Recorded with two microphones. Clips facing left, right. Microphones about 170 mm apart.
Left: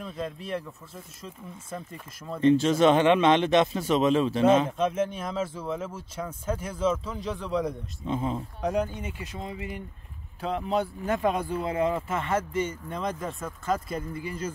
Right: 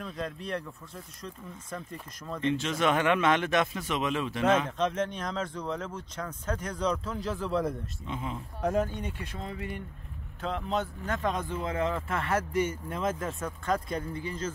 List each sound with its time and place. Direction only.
0.0 s speech: 5° left (ahead or behind)
2.4 s speech: 35° left (ahead or behind)
4.7 s speech: 10° left (ahead or behind)
8.1 s speech: 35° left (ahead or behind)
8.6 s speech: centre (ahead or behind); by 12.0 s 15° left (ahead or behind)
12.5 s speech: 10° right (ahead or behind); by 14.5 s 10° left (ahead or behind)